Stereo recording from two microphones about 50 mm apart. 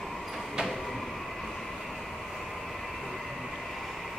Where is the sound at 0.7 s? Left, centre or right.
Centre.